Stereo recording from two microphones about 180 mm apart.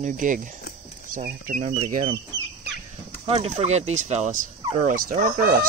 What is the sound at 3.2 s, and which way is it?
Speech, 35° right (ahead or behind).